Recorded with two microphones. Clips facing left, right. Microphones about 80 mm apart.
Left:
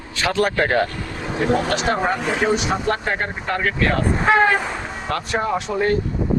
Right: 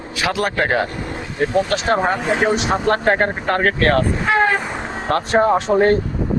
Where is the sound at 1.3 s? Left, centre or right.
Left.